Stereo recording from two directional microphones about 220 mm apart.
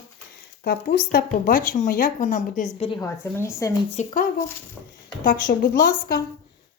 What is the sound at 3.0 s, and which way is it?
Speech, 15° left (ahead or behind).